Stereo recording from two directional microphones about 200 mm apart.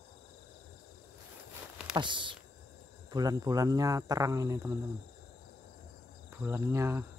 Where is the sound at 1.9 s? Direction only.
25° right (ahead or behind).